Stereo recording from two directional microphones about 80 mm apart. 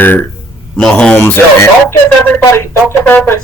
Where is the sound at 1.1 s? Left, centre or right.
Left.